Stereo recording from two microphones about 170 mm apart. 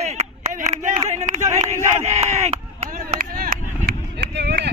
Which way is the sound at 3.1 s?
60° right (ahead or behind).